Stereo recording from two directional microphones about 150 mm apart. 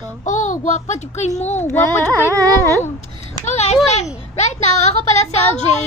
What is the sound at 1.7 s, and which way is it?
Carnatic music, 15° left (ahead or behind).